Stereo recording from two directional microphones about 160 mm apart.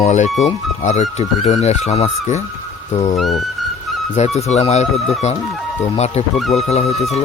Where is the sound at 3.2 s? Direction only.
Centre (ahead or behind).